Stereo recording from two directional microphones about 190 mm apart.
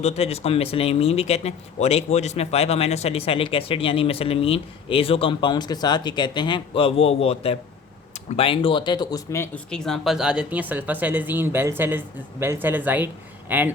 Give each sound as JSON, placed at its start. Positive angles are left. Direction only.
{"t": 0.0, "sound": "speech", "side_deg": 35}
{"t": 9.6, "sound": "speech", "side_deg": 5}